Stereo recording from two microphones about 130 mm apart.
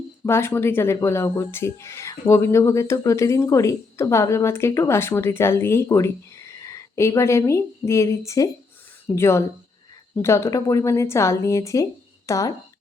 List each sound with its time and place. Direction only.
0.3 s speech: 20° left (ahead or behind)